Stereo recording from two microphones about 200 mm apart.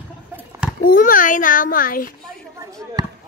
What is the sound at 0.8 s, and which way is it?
A child's voice, 45° left (ahead or behind).